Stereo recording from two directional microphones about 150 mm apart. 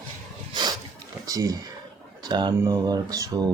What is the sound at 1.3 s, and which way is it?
Speech, 25° right (ahead or behind).